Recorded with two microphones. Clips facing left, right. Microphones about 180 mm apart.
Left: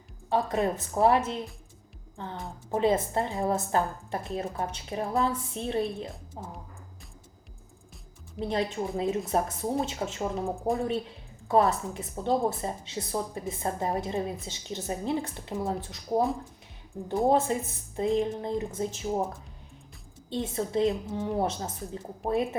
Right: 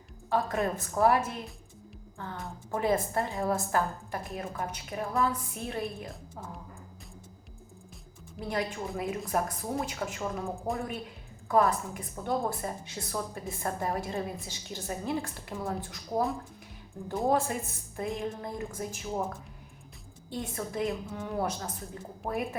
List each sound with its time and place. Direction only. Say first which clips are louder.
0.3 s a woman's voice: left 2 dB; 20° left (ahead or behind)
8.4 s a woman's voice: left 4 dB; 25° left (ahead or behind)
20.3 s a woman's voice: left 6 dB; 25° left (ahead or behind)